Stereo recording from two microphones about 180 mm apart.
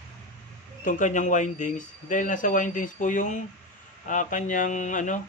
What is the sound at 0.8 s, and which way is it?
Speech, 45° left (ahead or behind).